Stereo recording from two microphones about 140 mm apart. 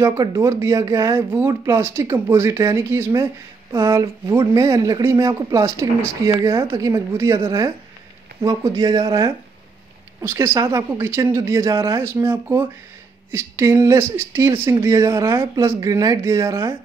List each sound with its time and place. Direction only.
0.0 s speech: 20° right (ahead or behind)